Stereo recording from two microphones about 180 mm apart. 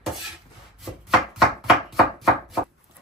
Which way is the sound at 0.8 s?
Centre (ahead or behind).